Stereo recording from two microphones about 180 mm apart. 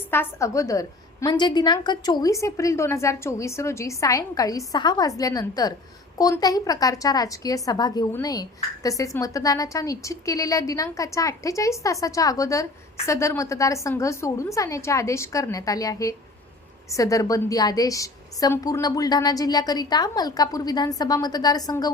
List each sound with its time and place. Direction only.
0.1 s a woman's voice: 15° left (ahead or behind)